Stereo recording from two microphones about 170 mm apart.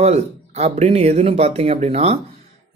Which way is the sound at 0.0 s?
40° right (ahead or behind).